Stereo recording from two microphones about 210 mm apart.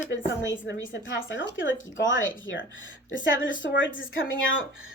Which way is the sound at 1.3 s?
60° left (ahead or behind).